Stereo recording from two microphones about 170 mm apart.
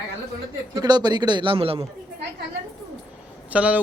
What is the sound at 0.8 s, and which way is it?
Speech, 25° right (ahead or behind).